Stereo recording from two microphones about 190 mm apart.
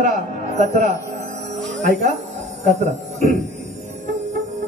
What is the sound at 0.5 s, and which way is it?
Speech, 35° right (ahead or behind).